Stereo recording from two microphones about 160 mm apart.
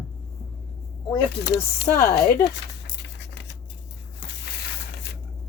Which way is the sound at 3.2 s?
90° left.